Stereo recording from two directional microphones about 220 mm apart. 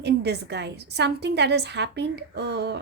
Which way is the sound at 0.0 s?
50° right (ahead or behind).